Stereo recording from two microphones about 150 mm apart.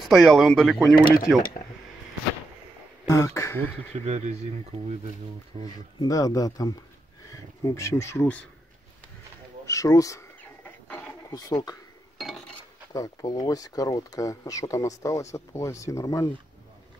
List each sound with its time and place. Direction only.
0.0 s speech: centre (ahead or behind)
1.0 s speech: 75° left (ahead or behind)
3.1 s speech: 20° left (ahead or behind)
4.0 s speech: 45° right (ahead or behind)
5.5 s speech: 30° right (ahead or behind)
5.9 s speech: 25° left (ahead or behind)
9.7 s speech: 20° left (ahead or behind)
10.6 s a sound: 10° left (ahead or behind)
11.3 s speech: 25° left (ahead or behind)
12.2 s chink: centre (ahead or behind)
12.9 s speech: 25° left (ahead or behind)